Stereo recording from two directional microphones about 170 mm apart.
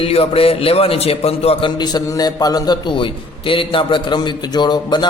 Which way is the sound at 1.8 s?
25° left (ahead or behind).